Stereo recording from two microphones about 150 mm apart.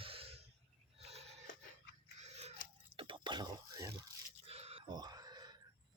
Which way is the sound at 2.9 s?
35° right (ahead or behind).